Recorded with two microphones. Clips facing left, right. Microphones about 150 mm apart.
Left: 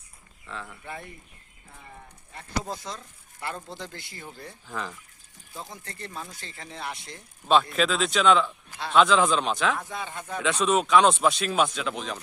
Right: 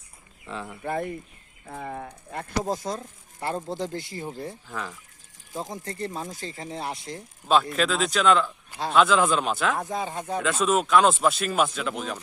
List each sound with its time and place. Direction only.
0.4 s speech: 15° right (ahead or behind)
1.6 s speech: 80° right
2.4 s speech: 45° right (ahead or behind)
4.1 s speech: 25° right (ahead or behind)
4.7 s speech: centre (ahead or behind)
5.5 s speech: 40° right (ahead or behind)
7.4 s speech: 5° right (ahead or behind)
9.9 s speech: 35° right (ahead or behind)
10.4 s speech: centre (ahead or behind)